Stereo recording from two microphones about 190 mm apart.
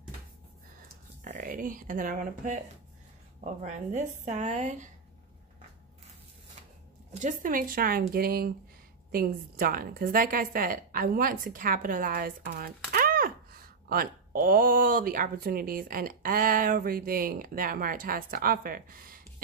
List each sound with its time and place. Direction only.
1.2 s speech: 45° right (ahead or behind)
7.2 s a woman's voice: 45° right (ahead or behind)